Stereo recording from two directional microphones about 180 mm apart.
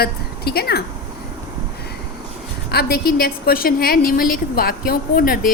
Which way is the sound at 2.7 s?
60° left (ahead or behind).